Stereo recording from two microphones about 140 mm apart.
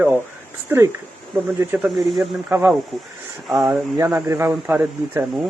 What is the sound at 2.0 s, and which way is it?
Speech, centre (ahead or behind).